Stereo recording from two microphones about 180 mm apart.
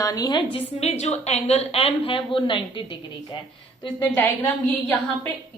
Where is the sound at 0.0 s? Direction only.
20° left (ahead or behind).